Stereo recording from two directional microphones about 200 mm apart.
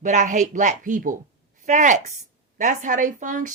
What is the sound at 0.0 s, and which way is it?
Speech, 40° right (ahead or behind).